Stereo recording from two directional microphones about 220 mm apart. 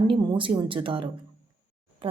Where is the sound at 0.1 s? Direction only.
20° right (ahead or behind).